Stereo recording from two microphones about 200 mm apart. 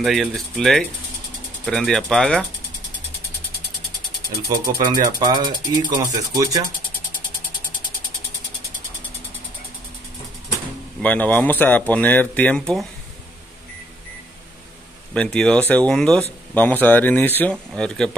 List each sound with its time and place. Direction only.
0.0 s speech: centre (ahead or behind)
4.5 s speech: 20° right (ahead or behind)
11.0 s speech: 5° left (ahead or behind)
15.1 s speech: 5° left (ahead or behind)